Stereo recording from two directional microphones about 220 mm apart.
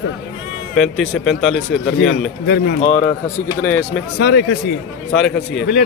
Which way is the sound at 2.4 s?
50° left (ahead or behind).